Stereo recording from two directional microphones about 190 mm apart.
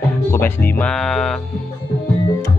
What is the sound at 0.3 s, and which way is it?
Speech, 10° left (ahead or behind).